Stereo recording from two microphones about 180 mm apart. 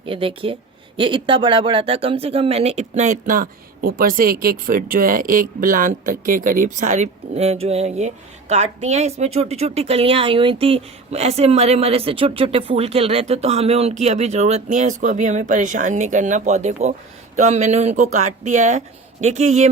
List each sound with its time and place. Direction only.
0.0 s speech: 30° right (ahead or behind)